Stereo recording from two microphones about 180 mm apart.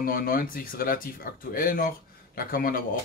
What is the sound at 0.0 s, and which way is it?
Speech, 55° left (ahead or behind).